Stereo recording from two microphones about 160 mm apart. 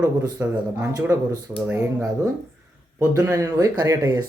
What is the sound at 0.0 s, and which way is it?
Speech, 15° right (ahead or behind).